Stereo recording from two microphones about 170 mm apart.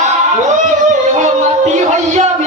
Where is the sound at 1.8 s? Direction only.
45° right (ahead or behind).